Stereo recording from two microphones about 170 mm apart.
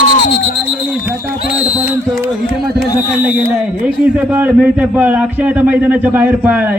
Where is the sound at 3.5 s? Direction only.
5° right (ahead or behind).